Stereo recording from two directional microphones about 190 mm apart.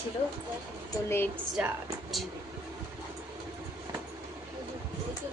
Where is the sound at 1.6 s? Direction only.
5° right (ahead or behind).